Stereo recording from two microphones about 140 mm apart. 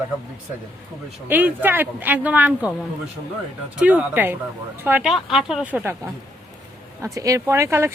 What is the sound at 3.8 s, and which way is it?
Speech, 10° right (ahead or behind).